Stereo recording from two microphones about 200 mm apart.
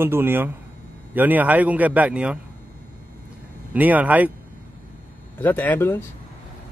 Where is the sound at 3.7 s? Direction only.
10° right (ahead or behind).